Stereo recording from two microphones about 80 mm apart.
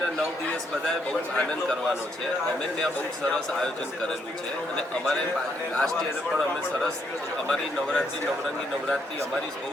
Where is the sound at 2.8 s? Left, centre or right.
Centre.